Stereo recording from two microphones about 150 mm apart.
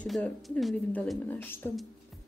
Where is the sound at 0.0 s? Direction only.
5° left (ahead or behind).